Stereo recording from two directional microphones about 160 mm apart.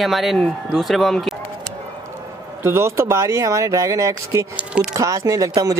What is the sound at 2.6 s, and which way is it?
Speech, 15° right (ahead or behind).